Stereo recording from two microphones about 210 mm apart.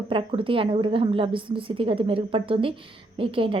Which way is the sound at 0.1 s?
25° right (ahead or behind).